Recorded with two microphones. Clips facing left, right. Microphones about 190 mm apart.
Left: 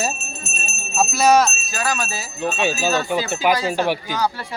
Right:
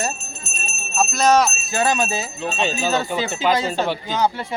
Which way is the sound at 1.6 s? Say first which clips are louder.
Right 5 dB; 25° right (ahead or behind).